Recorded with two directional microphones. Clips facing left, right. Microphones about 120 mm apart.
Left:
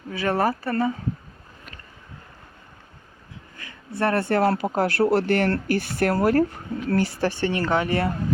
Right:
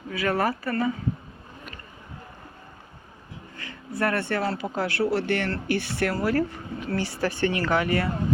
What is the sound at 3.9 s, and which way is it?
Speech, 30° left (ahead or behind).